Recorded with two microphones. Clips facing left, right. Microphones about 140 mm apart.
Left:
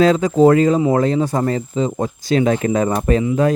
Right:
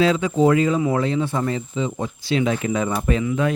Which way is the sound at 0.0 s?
40° left (ahead or behind).